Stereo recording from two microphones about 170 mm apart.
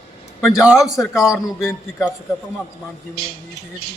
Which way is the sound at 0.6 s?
Centre (ahead or behind).